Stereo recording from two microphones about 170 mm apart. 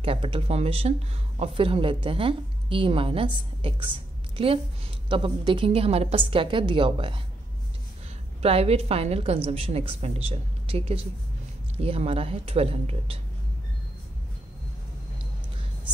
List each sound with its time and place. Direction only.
0.0 s a woman's voice: 30° right (ahead or behind)
8.4 s a woman's voice: 35° right (ahead or behind)